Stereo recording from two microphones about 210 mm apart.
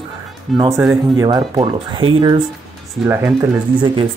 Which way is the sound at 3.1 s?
10° right (ahead or behind).